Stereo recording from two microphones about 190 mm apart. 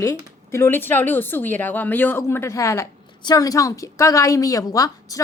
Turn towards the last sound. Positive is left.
turn(degrees=20)  # may be behind; listen again after turning